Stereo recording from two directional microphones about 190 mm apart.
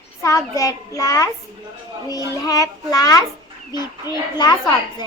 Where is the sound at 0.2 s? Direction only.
15° left (ahead or behind).